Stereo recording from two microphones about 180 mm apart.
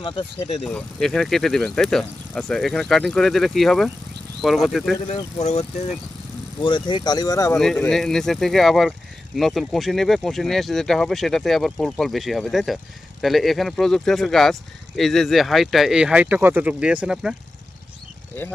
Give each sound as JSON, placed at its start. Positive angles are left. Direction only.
{"t": 0.0, "sound": "speech", "side_deg": 30}
{"t": 0.6, "sound": "speech", "side_deg": 5}
{"t": 5.0, "sound": "speech", "side_deg": 35}
{"t": 6.6, "sound": "speech", "side_deg": 25}
{"t": 7.6, "sound": "speech", "side_deg": 5}
{"t": 18.3, "sound": "speech", "side_deg": 10}